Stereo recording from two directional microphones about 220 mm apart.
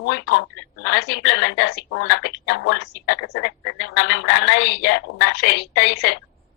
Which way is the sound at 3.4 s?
70° left (ahead or behind).